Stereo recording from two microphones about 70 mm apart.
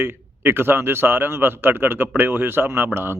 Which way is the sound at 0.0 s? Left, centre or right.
Right.